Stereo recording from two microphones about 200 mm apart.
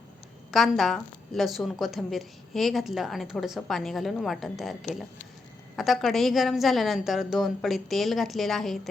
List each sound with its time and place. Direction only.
0.5 s a woman's voice: centre (ahead or behind)